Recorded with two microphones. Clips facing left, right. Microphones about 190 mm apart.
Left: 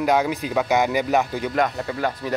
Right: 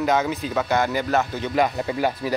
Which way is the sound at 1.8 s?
15° right (ahead or behind).